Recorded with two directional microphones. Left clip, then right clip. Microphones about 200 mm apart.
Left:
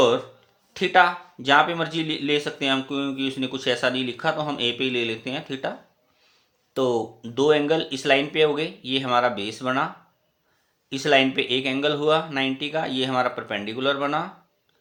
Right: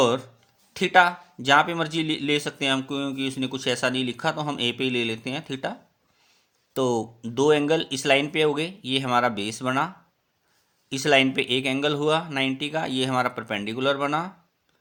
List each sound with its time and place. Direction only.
0.7 s speech: 40° right (ahead or behind)
6.7 s speech: 40° right (ahead or behind)